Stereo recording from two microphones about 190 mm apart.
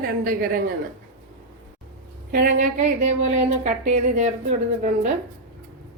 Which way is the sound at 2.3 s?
45° right (ahead or behind).